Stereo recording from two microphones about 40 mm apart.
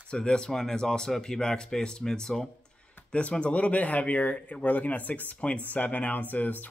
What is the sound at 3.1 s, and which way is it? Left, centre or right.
Speech, left.